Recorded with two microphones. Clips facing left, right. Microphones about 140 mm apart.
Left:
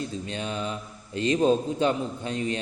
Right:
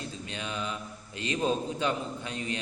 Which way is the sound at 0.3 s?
35° left (ahead or behind).